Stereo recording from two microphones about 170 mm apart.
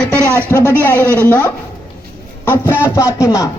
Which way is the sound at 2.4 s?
10° left (ahead or behind).